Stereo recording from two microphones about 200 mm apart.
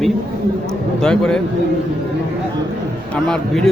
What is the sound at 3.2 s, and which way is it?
Speech, 5° left (ahead or behind).